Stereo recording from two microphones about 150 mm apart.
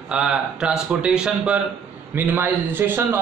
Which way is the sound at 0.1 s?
5° right (ahead or behind).